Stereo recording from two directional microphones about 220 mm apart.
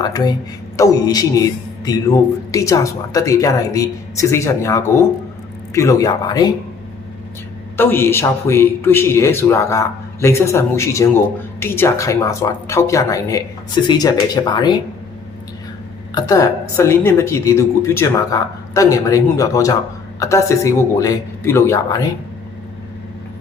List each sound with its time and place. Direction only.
0.0 s a man's voice: 15° left (ahead or behind)
7.8 s a man's voice: 10° left (ahead or behind)
16.1 s a man's voice: 15° left (ahead or behind)